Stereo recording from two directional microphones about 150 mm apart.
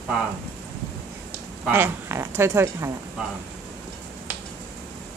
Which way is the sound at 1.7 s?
15° right (ahead or behind).